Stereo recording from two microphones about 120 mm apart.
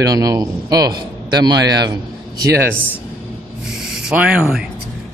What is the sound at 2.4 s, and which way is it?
Speech, 20° right (ahead or behind).